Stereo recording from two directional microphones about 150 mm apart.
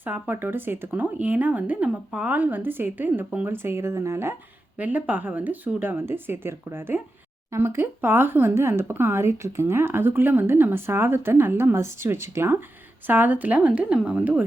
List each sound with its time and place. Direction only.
0.0 s speech: 10° right (ahead or behind)